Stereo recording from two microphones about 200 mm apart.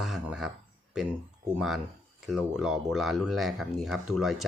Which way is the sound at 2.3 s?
5° right (ahead or behind).